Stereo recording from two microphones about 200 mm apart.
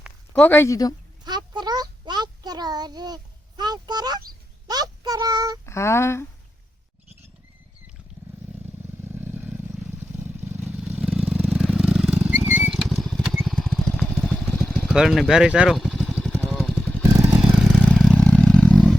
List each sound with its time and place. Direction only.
0.3 s speech: 10° left (ahead or behind)
1.2 s a sound: 20° right (ahead or behind)
4.7 s child singing: 20° right (ahead or behind)
5.6 s speech: 15° left (ahead or behind)
9.0 s vehicle: 10° right (ahead or behind); by 18.8 s 5° left (ahead or behind)